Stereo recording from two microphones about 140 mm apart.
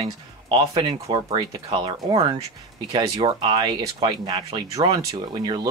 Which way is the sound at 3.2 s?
40° right (ahead or behind).